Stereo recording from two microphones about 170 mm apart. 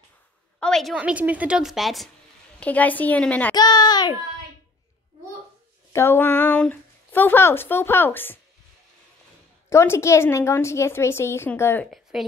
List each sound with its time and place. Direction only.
0.6 s a woman's voice: 5° left (ahead or behind)
3.5 s a child's voice: 25° left (ahead or behind)
5.9 s speech: 15° left (ahead or behind)
9.7 s speech: 15° left (ahead or behind)
11.9 s speech: centre (ahead or behind)